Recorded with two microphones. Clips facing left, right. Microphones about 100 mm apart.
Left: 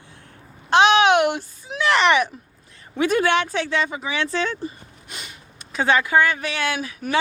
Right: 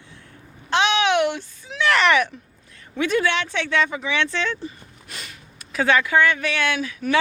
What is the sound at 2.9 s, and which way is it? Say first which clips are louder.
Speech: left 2 dB; 45° left (ahead or behind).